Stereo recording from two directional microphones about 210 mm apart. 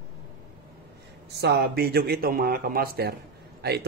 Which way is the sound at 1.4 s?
50° right (ahead or behind).